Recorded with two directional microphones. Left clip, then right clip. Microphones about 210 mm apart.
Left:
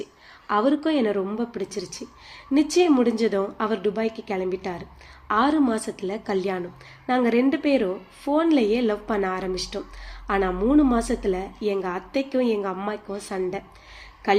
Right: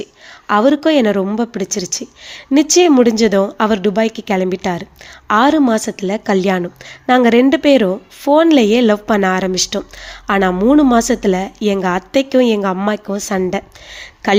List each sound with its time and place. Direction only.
0.0 s a woman's voice: 45° right (ahead or behind)